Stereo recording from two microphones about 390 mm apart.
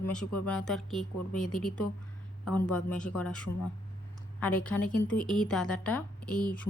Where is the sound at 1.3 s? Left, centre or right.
Centre.